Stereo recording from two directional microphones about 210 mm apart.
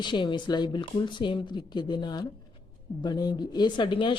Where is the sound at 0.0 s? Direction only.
20° left (ahead or behind).